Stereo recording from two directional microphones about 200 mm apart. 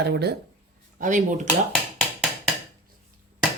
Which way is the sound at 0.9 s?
40° right (ahead or behind).